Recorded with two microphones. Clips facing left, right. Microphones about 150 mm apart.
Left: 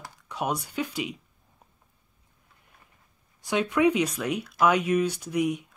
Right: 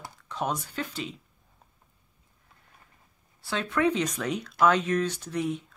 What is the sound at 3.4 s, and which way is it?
Speech, 15° left (ahead or behind).